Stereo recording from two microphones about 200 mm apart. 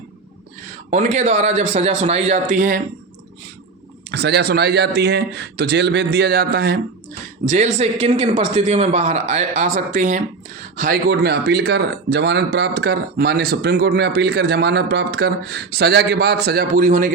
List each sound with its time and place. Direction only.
0.9 s speech: 35° right (ahead or behind)
4.1 s a man's voice: 55° right (ahead or behind)
7.4 s speech: 35° right (ahead or behind)
10.8 s speech: 50° right (ahead or behind)